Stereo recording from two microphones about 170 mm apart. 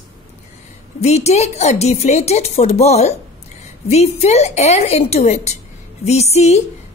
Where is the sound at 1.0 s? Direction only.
40° left (ahead or behind).